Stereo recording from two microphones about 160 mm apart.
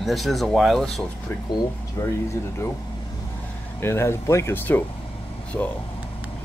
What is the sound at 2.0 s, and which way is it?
Speech, 20° left (ahead or behind).